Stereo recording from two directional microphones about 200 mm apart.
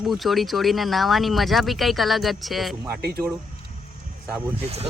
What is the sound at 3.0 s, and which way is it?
Speech, 50° right (ahead or behind).